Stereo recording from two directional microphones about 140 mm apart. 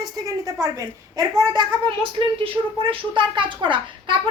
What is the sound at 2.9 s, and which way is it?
A child's voice, 35° right (ahead or behind).